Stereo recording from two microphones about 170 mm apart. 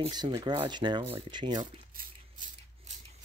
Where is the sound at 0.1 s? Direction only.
25° right (ahead or behind).